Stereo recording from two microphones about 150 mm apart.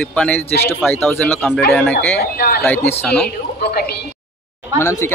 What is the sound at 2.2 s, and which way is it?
Speech, 90° left.